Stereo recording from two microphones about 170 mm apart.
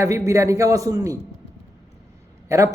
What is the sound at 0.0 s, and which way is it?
A man's voice, 20° right (ahead or behind).